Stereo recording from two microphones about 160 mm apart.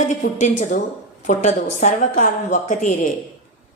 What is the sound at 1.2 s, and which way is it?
A woman's voice, 50° left (ahead or behind).